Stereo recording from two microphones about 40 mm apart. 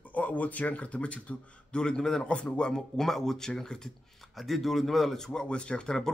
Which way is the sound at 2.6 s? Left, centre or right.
Centre.